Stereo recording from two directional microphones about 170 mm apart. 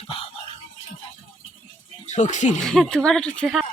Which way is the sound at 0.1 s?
35° left (ahead or behind).